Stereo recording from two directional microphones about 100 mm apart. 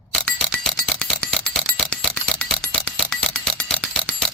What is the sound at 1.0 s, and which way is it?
Music, 5° left (ahead or behind).